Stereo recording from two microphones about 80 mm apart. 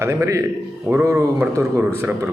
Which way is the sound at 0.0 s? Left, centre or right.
Right.